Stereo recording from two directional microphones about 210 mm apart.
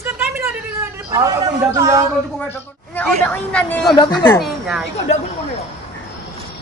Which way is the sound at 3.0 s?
5° left (ahead or behind).